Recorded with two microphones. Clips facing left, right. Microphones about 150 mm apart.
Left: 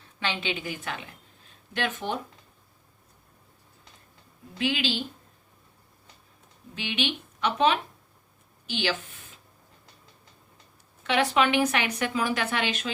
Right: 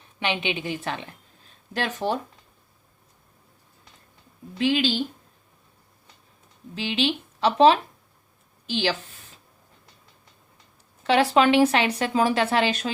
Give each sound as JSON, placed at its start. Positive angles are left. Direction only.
{"t": 0.0, "sound": "a woman's voice", "side_deg": -15}
{"t": 4.5, "sound": "speech", "side_deg": -35}
{"t": 6.7, "sound": "a woman's voice", "side_deg": -30}
{"t": 11.0, "sound": "speech", "side_deg": -35}